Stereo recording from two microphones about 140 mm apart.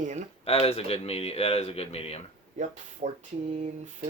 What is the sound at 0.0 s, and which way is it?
Speech, 60° right (ahead or behind).